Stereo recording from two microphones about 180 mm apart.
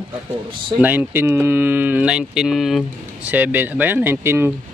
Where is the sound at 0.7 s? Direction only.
10° right (ahead or behind).